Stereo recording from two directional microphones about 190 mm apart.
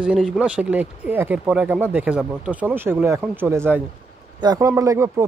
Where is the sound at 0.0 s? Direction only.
5° right (ahead or behind).